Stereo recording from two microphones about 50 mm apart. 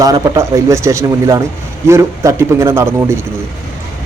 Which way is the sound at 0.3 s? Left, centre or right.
Right.